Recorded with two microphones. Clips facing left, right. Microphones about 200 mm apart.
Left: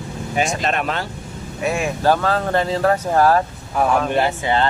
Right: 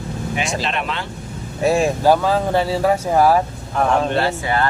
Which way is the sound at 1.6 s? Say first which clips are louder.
Right 5 dB; 35° right (ahead or behind).